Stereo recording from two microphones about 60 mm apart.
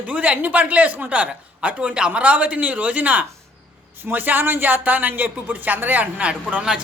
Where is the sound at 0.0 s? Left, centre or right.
Right.